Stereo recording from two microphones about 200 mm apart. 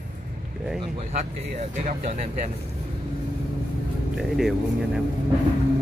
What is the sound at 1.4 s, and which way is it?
Speech, 35° right (ahead or behind).